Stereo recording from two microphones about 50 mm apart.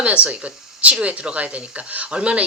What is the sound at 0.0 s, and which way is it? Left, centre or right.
Speech, right.